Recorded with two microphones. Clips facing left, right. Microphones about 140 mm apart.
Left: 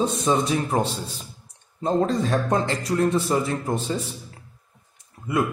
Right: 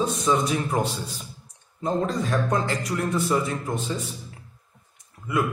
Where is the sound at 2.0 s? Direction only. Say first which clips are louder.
Left 4 dB; 35° left (ahead or behind).